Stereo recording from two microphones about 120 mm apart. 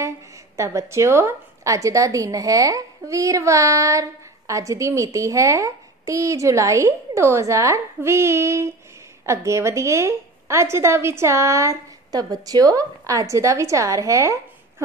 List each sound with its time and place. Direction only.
0.6 s a woman's voice: 25° right (ahead or behind)